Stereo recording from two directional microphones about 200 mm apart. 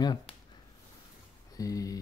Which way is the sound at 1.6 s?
15° left (ahead or behind).